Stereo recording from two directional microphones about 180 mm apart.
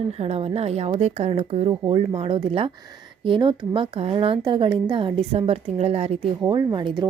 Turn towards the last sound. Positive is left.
turn(degrees=-25)  # may be behind; listen again after turning